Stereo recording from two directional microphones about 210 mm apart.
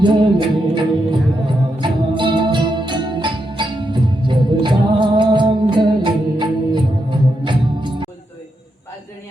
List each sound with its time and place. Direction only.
0.0 s music: 20° right (ahead or behind)